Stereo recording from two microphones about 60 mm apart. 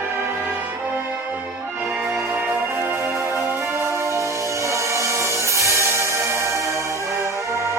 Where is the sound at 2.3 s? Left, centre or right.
Right.